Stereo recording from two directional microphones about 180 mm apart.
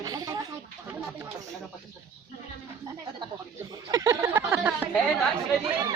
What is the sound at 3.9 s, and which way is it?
Speech, 15° right (ahead or behind).